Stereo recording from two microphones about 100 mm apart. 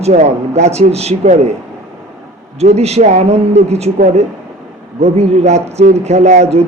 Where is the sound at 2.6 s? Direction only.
90° right.